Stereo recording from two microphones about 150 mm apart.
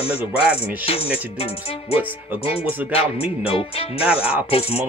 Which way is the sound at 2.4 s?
40° left (ahead or behind).